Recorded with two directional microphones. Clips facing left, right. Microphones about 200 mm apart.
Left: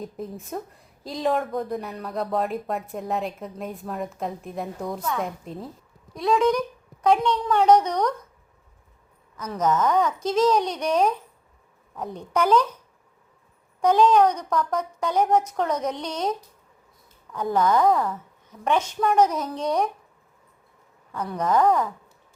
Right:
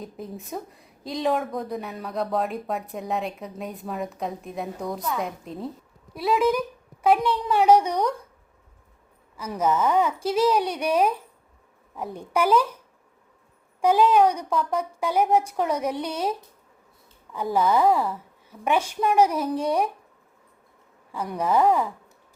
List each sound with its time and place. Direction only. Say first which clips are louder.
0.0 s a woman's voice: left 2 dB; centre (ahead or behind)
9.4 s a woman's voice: even; 10° right (ahead or behind)
13.8 s a woman's voice: left 1 dB; 10° right (ahead or behind)
21.1 s a woman's voice: even; 10° right (ahead or behind)